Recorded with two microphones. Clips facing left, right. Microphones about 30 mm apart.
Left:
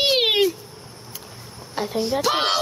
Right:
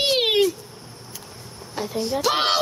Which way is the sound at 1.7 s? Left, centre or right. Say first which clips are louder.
Left 2 dB; centre.